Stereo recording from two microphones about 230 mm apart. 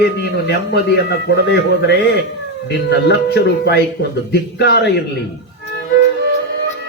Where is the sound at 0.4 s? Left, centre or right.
Left.